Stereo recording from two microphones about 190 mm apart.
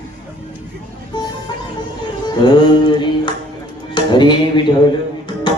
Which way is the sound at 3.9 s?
25° left (ahead or behind).